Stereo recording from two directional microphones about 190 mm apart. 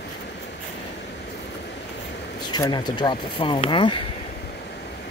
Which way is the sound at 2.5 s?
20° left (ahead or behind).